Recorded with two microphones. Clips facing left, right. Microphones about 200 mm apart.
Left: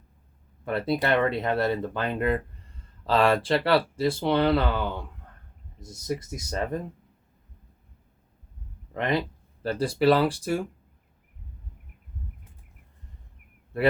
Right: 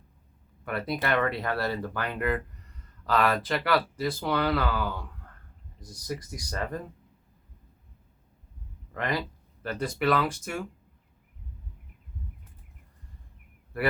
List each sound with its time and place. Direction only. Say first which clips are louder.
0.6 s speech: left 5 dB; 25° left (ahead or behind)
8.9 s speech: left 4 dB; 25° left (ahead or behind)
13.7 s speech: left 5 dB; 25° left (ahead or behind)